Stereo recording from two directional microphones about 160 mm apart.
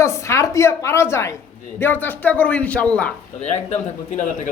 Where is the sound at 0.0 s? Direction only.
20° left (ahead or behind).